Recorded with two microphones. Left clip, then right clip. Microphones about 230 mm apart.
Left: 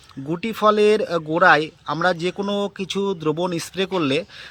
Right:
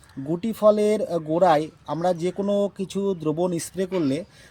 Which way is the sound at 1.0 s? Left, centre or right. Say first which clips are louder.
Left 4 dB; left.